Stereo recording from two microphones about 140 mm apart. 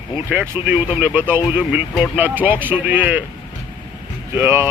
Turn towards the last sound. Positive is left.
turn(degrees=-15)  # may be behind; listen again after turning